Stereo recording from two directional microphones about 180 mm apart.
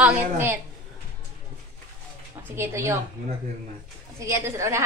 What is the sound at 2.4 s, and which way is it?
Speech, 15° right (ahead or behind).